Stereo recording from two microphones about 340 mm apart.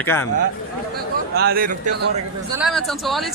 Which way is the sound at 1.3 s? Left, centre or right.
Right.